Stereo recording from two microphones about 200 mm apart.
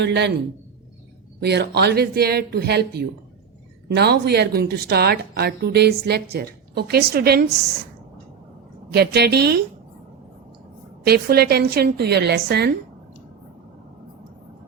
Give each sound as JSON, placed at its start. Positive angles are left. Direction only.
{"t": 0.0, "sound": "speech", "side_deg": -60}
{"t": 1.4, "sound": "a woman's voice", "side_deg": -55}
{"t": 8.9, "sound": "a woman's voice", "side_deg": -55}
{"t": 11.0, "sound": "a woman's voice", "side_deg": -50}